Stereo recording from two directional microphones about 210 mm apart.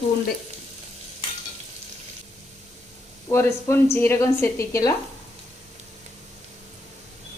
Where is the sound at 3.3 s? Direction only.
10° left (ahead or behind).